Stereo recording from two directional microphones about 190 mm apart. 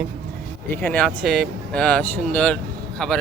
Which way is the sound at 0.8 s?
10° left (ahead or behind).